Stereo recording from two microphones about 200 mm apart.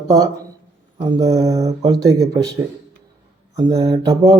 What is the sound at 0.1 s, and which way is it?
Speech, 20° right (ahead or behind).